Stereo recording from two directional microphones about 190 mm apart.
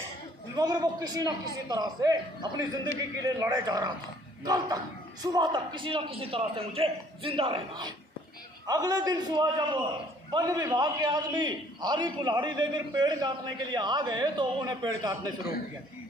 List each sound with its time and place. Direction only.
0.5 s a man's voice: 20° right (ahead or behind)